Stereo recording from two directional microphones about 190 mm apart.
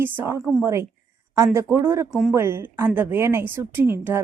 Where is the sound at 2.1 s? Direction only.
Centre (ahead or behind).